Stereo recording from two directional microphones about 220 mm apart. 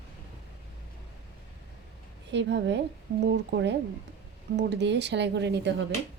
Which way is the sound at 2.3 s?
50° right (ahead or behind).